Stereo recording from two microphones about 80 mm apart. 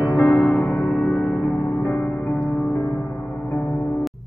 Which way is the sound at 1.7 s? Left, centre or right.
Left.